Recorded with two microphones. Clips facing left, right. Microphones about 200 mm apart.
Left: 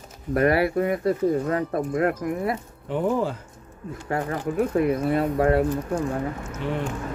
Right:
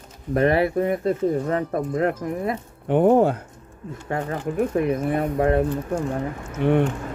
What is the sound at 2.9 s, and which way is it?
Speech, 55° right (ahead or behind).